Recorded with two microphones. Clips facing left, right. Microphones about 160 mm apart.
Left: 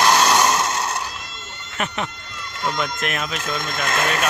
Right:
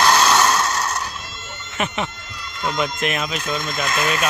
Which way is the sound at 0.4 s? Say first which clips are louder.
Even; 15° left (ahead or behind).